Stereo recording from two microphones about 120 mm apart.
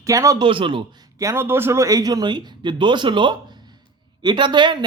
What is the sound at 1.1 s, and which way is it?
Speech, 25° right (ahead or behind).